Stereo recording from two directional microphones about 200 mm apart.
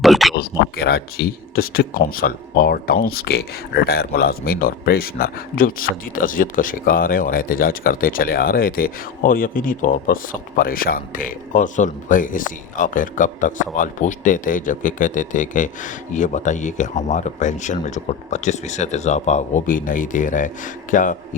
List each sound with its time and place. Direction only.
0.0 s speech: centre (ahead or behind)
0.3 s speech: 50° left (ahead or behind)